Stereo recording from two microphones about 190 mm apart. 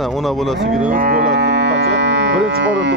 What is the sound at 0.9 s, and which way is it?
Cattle, 50° right (ahead or behind).